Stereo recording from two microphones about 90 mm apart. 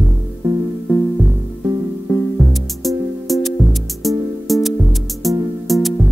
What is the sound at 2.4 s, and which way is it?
Music, centre (ahead or behind).